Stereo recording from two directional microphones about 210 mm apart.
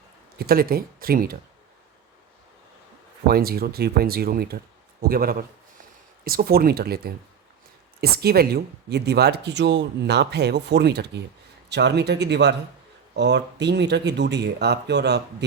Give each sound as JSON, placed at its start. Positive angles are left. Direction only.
{"t": 0.3, "sound": "speech", "side_deg": -45}
{"t": 3.2, "sound": "speech", "side_deg": -45}